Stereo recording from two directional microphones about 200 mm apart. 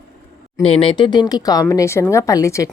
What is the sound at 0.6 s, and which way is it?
A woman's voice, 30° left (ahead or behind).